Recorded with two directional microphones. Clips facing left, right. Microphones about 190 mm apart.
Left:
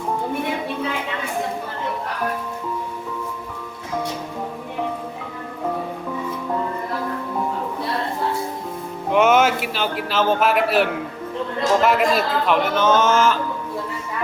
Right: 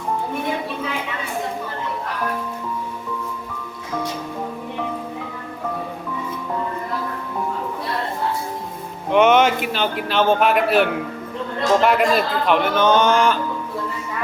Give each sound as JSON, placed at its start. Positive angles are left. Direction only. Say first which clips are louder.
{"t": 9.1, "sound": "a man's voice", "louder": "right 2 dB", "side_deg": 5}